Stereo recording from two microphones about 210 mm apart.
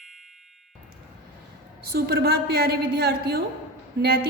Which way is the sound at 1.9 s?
50° right (ahead or behind).